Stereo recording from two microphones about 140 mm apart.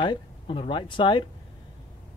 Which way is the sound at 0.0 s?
35° left (ahead or behind).